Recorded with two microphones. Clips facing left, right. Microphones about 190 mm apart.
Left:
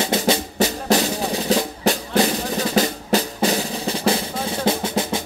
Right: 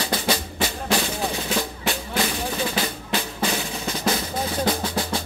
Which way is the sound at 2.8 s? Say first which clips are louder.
Left 7 dB; 40° left (ahead or behind).